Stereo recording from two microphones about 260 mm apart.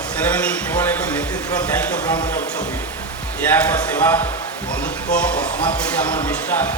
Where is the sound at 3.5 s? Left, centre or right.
Centre.